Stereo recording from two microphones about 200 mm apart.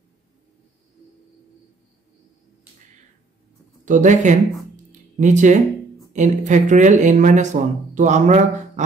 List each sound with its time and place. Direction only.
3.8 s speech: 40° right (ahead or behind)